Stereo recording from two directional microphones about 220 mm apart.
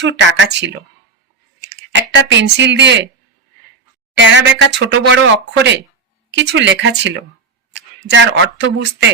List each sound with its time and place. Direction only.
0.0 s speech: 55° right (ahead or behind)
1.9 s speech: 55° right (ahead or behind)
4.1 s speech: 55° right (ahead or behind)